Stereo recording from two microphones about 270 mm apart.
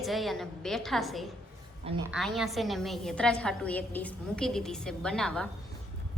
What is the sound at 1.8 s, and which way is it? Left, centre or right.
Speech, centre.